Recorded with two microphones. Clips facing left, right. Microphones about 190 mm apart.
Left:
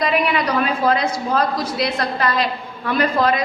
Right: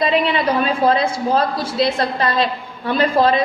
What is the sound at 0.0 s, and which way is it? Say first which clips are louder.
A woman's voice: right 2 dB; 25° right (ahead or behind).